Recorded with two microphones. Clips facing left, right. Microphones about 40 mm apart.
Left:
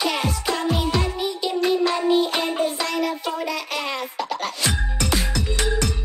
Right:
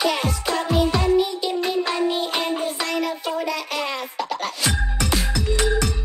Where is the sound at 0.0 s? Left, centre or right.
Centre.